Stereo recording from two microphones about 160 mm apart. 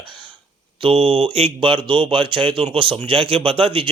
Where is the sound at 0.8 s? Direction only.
35° right (ahead or behind).